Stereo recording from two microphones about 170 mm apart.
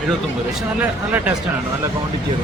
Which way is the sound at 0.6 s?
10° right (ahead or behind).